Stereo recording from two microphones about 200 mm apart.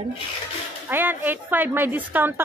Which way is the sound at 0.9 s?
10° right (ahead or behind).